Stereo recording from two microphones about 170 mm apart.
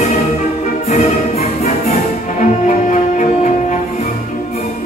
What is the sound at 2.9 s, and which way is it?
Music, 45° left (ahead or behind).